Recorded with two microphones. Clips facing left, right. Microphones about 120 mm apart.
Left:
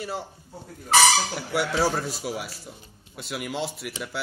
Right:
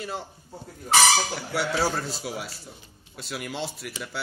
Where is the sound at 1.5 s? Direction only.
15° left (ahead or behind).